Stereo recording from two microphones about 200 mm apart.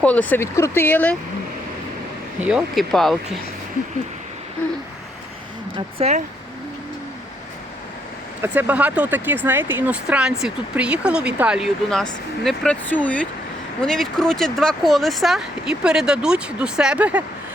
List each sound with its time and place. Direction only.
0.0 s speech: 5° left (ahead or behind)
2.4 s speech: 5° right (ahead or behind)
6.0 s speech: 35° right (ahead or behind)
8.4 s speech: 10° right (ahead or behind)